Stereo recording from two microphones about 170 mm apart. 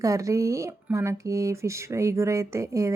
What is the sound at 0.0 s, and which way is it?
A woman's voice, 20° right (ahead or behind).